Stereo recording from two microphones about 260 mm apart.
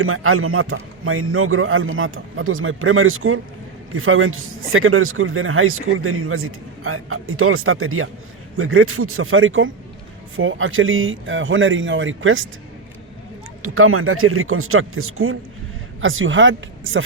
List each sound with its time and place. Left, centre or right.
0.0 s a man's voice: right
13.6 s a man's voice: right